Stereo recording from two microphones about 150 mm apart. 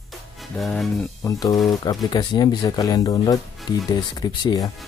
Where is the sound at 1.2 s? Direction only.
25° left (ahead or behind).